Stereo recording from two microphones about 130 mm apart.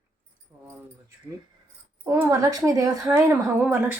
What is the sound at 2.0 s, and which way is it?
Speech, 25° right (ahead or behind).